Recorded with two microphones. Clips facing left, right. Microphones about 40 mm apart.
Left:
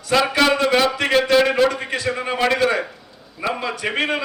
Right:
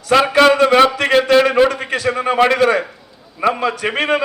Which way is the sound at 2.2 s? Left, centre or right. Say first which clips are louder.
Right 6 dB; right.